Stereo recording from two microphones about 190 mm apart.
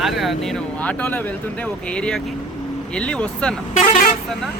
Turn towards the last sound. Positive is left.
turn(degrees=40)  # may be behind; listen again after turning